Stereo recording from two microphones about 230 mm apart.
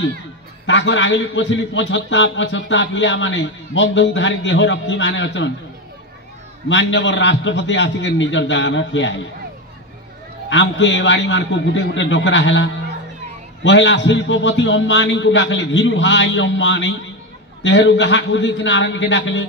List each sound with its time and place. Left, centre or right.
0.7 s a man's voice: left
6.7 s a man's voice: left
10.5 s a man's voice: left